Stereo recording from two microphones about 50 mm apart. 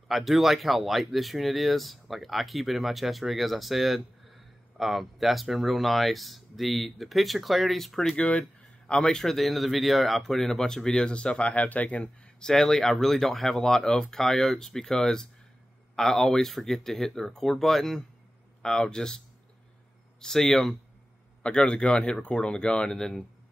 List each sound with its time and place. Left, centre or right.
0.1 s speech: centre
8.2 s speech: left
12.0 s speech: centre
21.4 s speech: centre